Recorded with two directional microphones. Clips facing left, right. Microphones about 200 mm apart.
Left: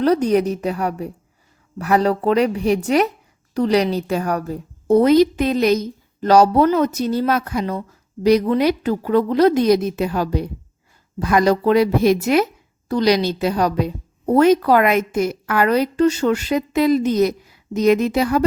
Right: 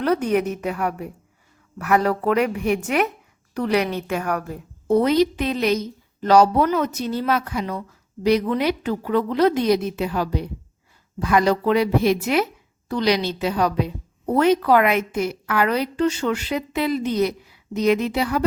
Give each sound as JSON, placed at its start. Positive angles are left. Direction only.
{"t": 0.0, "sound": "a woman's voice", "side_deg": 35}